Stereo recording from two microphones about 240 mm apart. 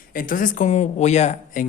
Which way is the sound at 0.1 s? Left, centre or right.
Left.